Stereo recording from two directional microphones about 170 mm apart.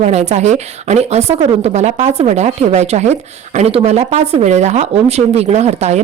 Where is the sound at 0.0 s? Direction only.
40° right (ahead or behind).